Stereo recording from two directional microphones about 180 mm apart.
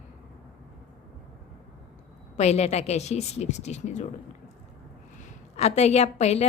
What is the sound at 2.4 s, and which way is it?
A woman's voice, 35° left (ahead or behind).